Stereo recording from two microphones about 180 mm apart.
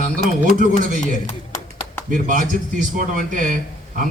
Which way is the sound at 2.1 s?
45° right (ahead or behind).